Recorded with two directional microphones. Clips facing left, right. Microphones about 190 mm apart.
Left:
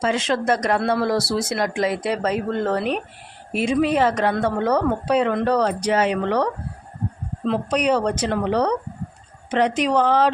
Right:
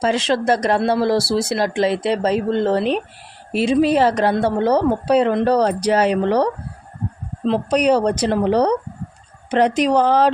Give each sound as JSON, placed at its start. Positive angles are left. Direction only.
{"t": 0.0, "sound": "a woman's voice", "side_deg": -35}